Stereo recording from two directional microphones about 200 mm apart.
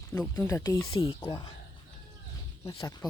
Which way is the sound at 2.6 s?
20° left (ahead or behind).